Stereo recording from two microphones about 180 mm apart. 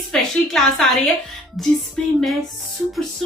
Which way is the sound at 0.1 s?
Centre (ahead or behind).